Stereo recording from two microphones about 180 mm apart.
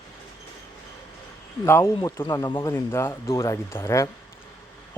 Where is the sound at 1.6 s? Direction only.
15° left (ahead or behind).